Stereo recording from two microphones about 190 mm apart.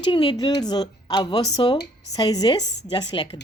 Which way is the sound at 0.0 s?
25° left (ahead or behind).